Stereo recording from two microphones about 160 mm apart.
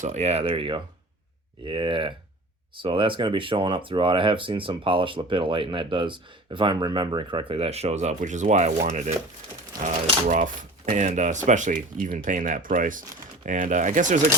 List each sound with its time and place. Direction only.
0.0 s speech: 45° right (ahead or behind)